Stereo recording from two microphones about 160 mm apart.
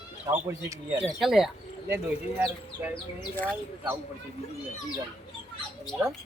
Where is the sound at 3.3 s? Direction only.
10° left (ahead or behind).